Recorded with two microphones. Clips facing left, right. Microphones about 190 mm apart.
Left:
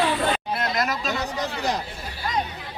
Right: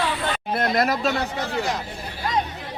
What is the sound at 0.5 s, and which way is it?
Speech, 55° right (ahead or behind).